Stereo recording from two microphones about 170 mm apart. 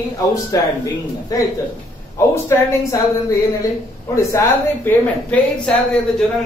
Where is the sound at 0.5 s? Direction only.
20° left (ahead or behind).